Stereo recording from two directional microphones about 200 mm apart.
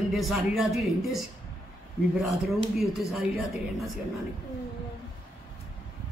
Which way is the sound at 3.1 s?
Centre (ahead or behind).